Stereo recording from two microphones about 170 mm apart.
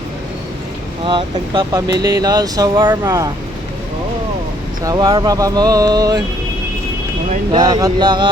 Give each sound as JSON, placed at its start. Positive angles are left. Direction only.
{"t": 1.0, "sound": "speech", "side_deg": -30}
{"t": 4.8, "sound": "speech", "side_deg": -25}
{"t": 7.5, "sound": "speech", "side_deg": -25}